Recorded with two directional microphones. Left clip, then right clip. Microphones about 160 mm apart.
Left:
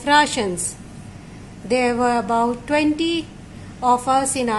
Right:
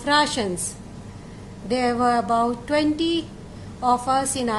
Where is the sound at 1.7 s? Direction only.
30° left (ahead or behind).